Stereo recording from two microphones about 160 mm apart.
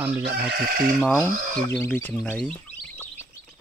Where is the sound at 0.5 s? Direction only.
65° right (ahead or behind).